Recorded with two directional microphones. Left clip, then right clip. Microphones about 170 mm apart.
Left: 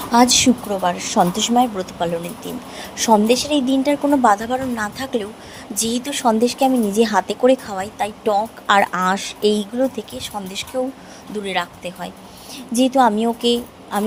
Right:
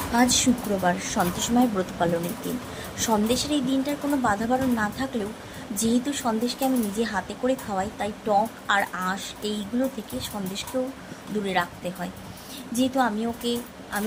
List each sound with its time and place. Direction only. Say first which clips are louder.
0.1 s speech: left 8 dB; 35° left (ahead or behind)